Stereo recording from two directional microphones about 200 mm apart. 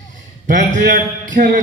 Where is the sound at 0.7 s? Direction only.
40° right (ahead or behind).